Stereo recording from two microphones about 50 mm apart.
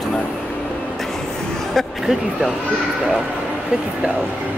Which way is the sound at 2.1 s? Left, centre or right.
Centre.